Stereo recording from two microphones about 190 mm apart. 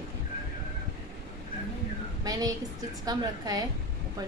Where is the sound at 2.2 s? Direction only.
20° right (ahead or behind).